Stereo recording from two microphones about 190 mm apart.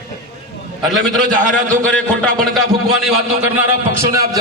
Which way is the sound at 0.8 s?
Centre (ahead or behind).